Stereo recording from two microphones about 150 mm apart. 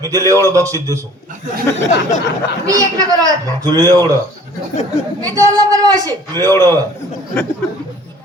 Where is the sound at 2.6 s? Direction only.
25° right (ahead or behind).